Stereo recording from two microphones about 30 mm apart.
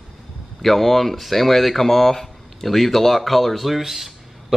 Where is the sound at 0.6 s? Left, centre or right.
Centre.